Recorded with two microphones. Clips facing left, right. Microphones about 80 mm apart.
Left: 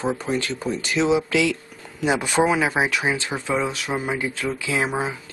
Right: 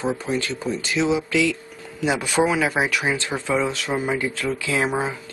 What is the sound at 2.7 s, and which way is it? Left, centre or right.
Speech, centre.